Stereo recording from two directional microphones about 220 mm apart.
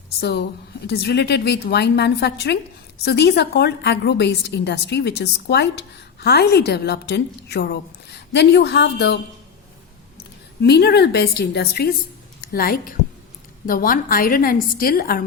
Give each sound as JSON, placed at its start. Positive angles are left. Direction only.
{"t": 0.2, "sound": "a woman's voice", "side_deg": 50}
{"t": 10.6, "sound": "a woman's voice", "side_deg": 50}